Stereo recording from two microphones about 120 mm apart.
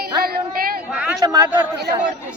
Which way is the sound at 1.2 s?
30° right (ahead or behind).